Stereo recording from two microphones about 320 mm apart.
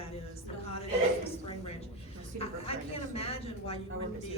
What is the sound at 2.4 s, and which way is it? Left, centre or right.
Speech, centre.